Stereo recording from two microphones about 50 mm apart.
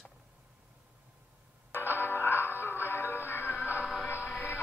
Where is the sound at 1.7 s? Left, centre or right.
Left.